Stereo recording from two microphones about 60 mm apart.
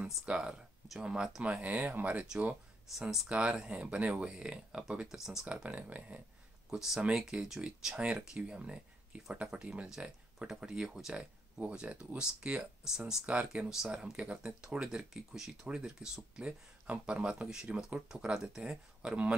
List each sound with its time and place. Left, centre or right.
0.0 s speech: centre
2.9 s speech: centre
3.3 s speech: centre
6.7 s speech: centre
8.0 s speech: centre